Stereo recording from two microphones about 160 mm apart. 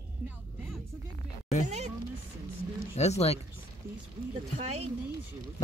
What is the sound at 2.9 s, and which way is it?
Speech, 40° left (ahead or behind).